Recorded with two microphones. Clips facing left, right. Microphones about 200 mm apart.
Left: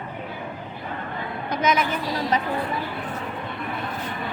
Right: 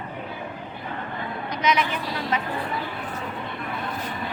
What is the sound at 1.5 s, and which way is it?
Speech, 45° left (ahead or behind).